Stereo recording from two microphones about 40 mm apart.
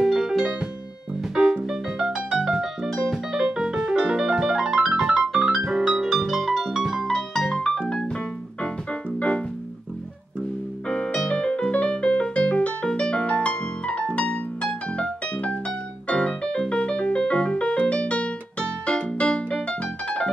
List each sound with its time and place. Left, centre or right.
0.0 s music: centre
2.1 s piano: centre
3.1 s music: centre
4.3 s music: centre
7.1 s music: centre
10.9 s music: left